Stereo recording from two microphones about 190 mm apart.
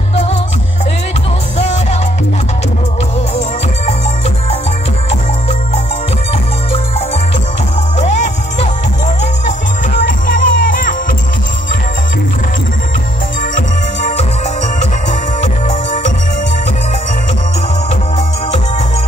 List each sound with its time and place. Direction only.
0.1 s music: 35° left (ahead or behind)
8.0 s music: 40° left (ahead or behind)
13.4 s music: 40° left (ahead or behind)